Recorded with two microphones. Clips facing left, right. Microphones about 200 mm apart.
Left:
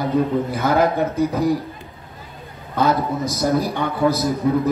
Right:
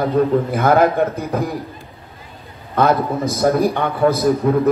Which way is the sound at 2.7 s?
55° right (ahead or behind).